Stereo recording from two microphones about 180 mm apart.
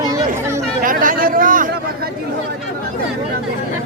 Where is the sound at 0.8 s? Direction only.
50° right (ahead or behind).